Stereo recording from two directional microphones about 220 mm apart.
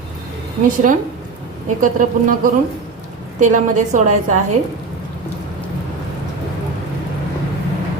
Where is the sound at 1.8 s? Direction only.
35° right (ahead or behind).